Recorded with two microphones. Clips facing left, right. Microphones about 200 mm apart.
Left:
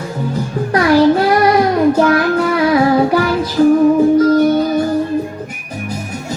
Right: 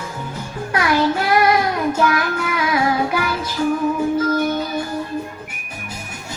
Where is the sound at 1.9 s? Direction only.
35° left (ahead or behind).